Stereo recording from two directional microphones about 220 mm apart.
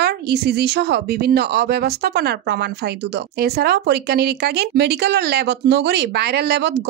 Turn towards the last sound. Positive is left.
turn(degrees=-50)  # may be behind; listen again after turning